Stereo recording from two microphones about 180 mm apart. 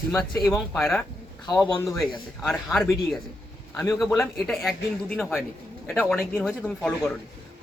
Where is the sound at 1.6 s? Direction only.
15° left (ahead or behind).